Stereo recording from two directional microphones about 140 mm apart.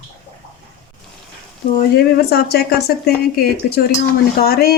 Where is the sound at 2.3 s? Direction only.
90° left.